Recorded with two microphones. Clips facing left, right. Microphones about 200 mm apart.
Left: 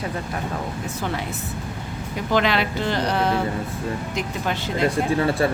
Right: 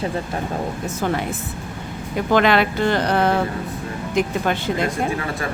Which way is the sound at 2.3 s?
55° right (ahead or behind).